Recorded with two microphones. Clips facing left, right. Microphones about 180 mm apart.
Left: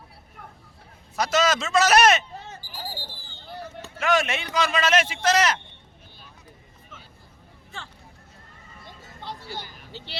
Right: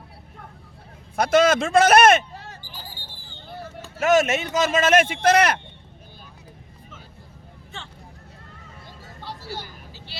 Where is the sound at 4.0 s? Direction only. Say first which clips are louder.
Right 5 dB; 45° right (ahead or behind).